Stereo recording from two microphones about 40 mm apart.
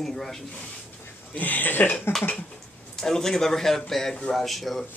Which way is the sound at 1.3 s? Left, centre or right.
Left.